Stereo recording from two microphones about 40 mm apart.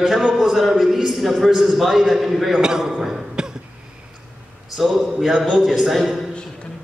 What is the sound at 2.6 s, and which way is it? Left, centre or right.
Speech, centre.